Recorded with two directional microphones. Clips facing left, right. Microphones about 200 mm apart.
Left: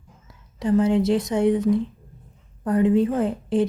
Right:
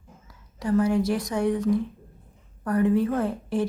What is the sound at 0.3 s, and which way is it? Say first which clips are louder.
A woman's voice: left 4 dB; 20° left (ahead or behind).